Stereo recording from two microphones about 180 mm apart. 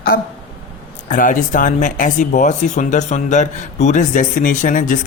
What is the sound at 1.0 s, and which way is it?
Speech, 45° left (ahead or behind).